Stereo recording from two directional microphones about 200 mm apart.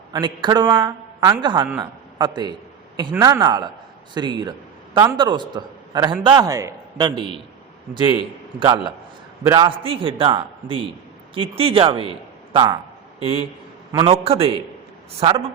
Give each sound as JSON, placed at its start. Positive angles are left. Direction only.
{"t": 0.1, "sound": "a man's voice", "side_deg": -20}
{"t": 8.5, "sound": "a man's voice", "side_deg": -25}
{"t": 13.9, "sound": "a man's voice", "side_deg": -30}